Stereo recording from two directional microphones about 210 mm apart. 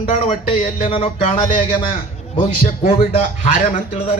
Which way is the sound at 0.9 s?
25° left (ahead or behind).